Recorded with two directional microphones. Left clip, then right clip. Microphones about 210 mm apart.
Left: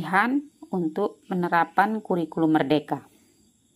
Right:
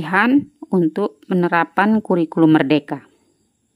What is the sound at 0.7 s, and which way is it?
Speech, 30° right (ahead or behind).